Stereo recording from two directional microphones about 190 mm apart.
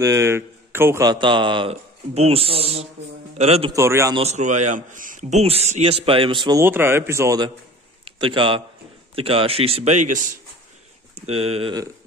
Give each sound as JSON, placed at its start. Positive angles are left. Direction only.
{"t": 0.0, "sound": "a man's voice", "side_deg": -15}
{"t": 3.7, "sound": "speech", "side_deg": -15}
{"t": 4.2, "sound": "a man's voice", "side_deg": -35}
{"t": 6.6, "sound": "a man's voice", "side_deg": -10}